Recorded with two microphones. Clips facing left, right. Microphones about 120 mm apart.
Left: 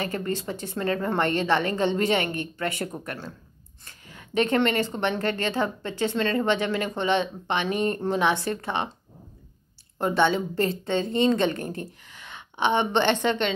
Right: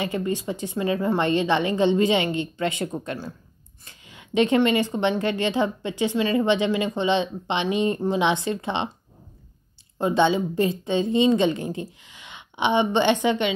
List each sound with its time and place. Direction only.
0.0 s speech: 15° right (ahead or behind)
4.1 s a woman's voice: 20° right (ahead or behind)
9.9 s speech: 15° right (ahead or behind)